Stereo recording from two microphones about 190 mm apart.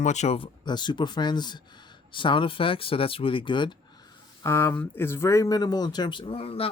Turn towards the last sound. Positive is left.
turn(degrees=30)  # may be behind; listen again after turning